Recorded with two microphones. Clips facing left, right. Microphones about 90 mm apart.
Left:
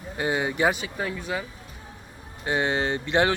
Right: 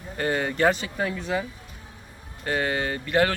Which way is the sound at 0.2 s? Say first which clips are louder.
Right 1 dB; 10° left (ahead or behind).